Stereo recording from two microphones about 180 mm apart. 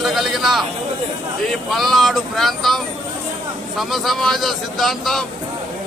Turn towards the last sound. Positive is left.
turn(degrees=0)  # may be behind; listen again after turning